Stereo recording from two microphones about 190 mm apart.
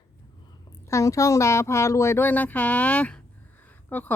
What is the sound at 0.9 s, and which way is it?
Speech, 15° left (ahead or behind).